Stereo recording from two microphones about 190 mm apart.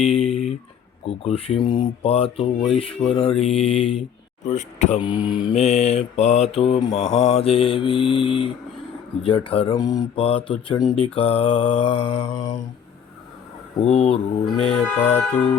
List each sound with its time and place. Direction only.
0.0 s a sound: 30° left (ahead or behind)
1.0 s mantra: 30° left (ahead or behind)
1.6 s speech: 25° left (ahead or behind)
4.4 s mantra: 40° left (ahead or behind)
5.2 s mantra: 25° left (ahead or behind)
7.0 s mantra: 90° left
7.3 s speech: 30° left (ahead or behind)
13.8 s mantra: 35° left (ahead or behind)
14.7 s music: 10° left (ahead or behind)